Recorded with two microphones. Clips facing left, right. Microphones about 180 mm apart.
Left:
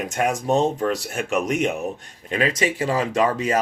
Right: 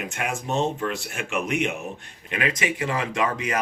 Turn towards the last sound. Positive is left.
turn(degrees=35)  # may be behind; listen again after turning